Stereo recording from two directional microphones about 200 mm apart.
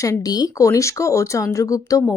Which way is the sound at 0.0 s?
15° left (ahead or behind).